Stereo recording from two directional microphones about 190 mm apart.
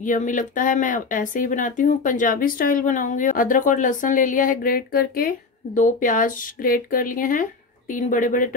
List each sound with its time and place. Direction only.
0.0 s speech: 45° left (ahead or behind)